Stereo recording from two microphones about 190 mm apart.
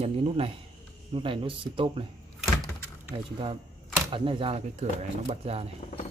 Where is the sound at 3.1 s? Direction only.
30° right (ahead or behind).